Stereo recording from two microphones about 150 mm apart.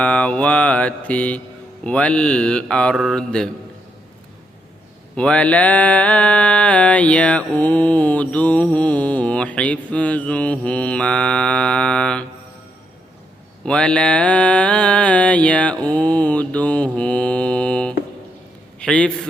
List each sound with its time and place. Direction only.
0.0 s mantra: 10° left (ahead or behind)
5.1 s mantra: 5° left (ahead or behind)
13.7 s mantra: 5° left (ahead or behind)
18.8 s a man's voice: 5° left (ahead or behind)